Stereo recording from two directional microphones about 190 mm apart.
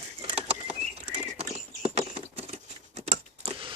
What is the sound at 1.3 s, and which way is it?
Patter, 30° right (ahead or behind).